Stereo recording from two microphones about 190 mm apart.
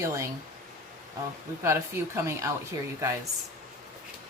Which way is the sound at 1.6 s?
15° right (ahead or behind).